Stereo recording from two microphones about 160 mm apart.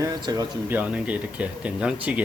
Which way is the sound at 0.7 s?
10° right (ahead or behind).